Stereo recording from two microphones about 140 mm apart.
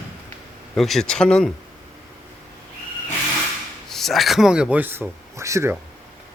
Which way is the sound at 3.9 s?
Centre (ahead or behind).